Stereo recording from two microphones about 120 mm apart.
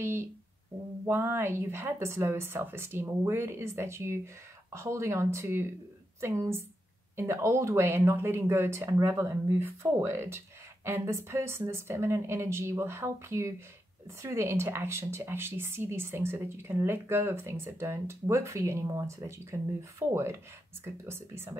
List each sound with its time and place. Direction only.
0.0 s speech: 20° right (ahead or behind)